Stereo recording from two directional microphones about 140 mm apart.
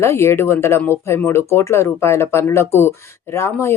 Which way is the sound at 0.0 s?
20° left (ahead or behind).